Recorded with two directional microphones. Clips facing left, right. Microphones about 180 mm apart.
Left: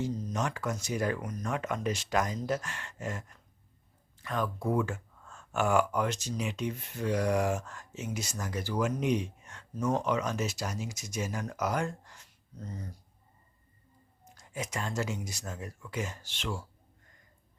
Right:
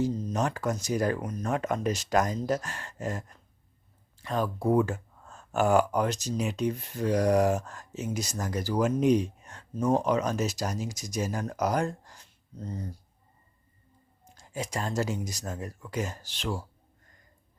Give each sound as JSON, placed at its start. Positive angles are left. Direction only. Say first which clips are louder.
{"t": 0.0, "sound": "speech", "louder": "right 5 dB", "side_deg": -30}
{"t": 14.3, "sound": "speech", "louder": "right 3 dB", "side_deg": -30}